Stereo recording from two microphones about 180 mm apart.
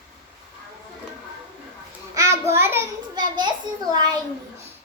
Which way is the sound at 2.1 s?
15° right (ahead or behind).